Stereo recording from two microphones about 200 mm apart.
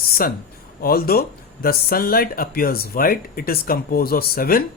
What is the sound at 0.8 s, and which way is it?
Speech, 50° left (ahead or behind).